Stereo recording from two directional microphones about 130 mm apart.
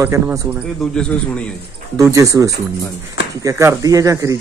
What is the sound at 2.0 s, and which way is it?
A man's voice, 25° right (ahead or behind).